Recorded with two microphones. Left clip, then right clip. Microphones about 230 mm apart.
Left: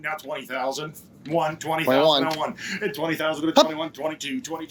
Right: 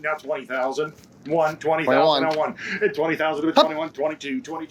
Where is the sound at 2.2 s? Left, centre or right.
Left.